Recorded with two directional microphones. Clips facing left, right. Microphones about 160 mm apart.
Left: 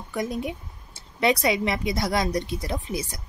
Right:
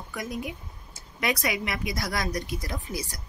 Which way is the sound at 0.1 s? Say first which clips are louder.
Left 6 dB; 25° left (ahead or behind).